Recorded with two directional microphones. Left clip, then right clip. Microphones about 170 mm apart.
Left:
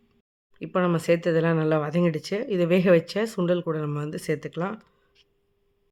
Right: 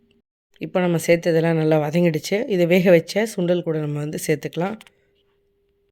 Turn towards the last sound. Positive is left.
turn(degrees=-20)  # may be behind; listen again after turning